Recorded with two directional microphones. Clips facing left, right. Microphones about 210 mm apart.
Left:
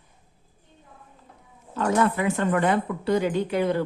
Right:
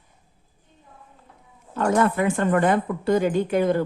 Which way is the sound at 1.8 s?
50° right (ahead or behind).